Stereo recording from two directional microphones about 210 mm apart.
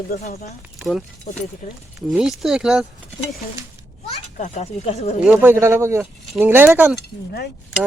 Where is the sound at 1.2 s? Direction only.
35° left (ahead or behind).